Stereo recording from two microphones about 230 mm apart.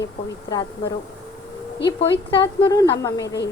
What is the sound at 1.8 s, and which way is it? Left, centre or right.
A woman's voice, left.